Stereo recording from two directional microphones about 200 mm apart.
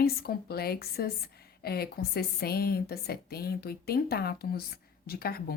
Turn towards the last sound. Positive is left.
turn(degrees=50)  # may be behind; listen again after turning